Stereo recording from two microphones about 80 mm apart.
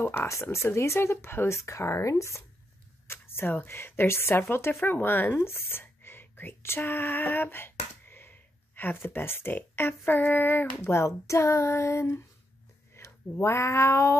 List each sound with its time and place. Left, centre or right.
0.0 s speech: left
3.1 s speech: left